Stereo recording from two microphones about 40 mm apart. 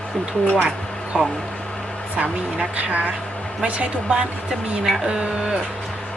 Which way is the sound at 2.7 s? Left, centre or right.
Right.